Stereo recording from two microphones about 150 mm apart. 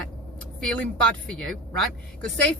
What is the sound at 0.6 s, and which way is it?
Speech, 5° left (ahead or behind).